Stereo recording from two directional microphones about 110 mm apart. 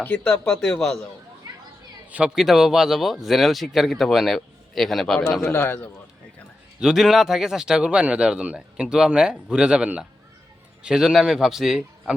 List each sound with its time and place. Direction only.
0.0 s speech: 10° left (ahead or behind)
2.0 s a man's voice: 10° right (ahead or behind)
5.5 s a man's voice: 20° left (ahead or behind)
6.7 s a man's voice: 5° right (ahead or behind)